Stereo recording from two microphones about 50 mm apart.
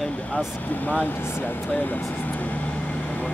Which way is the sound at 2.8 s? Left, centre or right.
Left.